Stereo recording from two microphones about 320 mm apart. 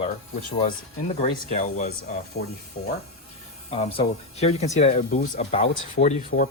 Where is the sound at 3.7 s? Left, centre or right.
Centre.